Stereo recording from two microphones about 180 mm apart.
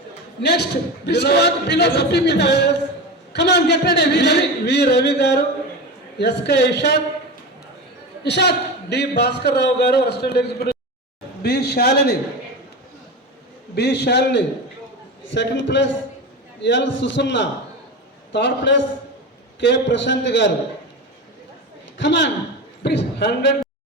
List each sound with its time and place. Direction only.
0.4 s a man's voice: 65° left (ahead or behind)
8.2 s a man's voice: 70° left (ahead or behind)
13.7 s a man's voice: 65° left (ahead or behind)
15.3 s a man's voice: 85° left
21.9 s a man's voice: 80° left
22.8 s a sound: 70° left (ahead or behind)